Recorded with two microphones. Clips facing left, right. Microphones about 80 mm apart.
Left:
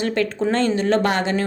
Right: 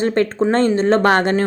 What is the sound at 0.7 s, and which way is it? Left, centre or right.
Speech, right.